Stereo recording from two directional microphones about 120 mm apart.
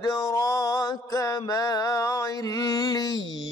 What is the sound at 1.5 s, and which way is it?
Mantra, 30° left (ahead or behind).